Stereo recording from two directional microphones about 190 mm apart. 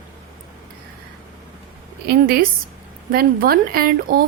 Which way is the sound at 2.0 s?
50° right (ahead or behind).